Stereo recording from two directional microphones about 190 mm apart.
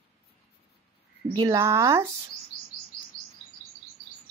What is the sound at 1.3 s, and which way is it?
Speech, 20° right (ahead or behind).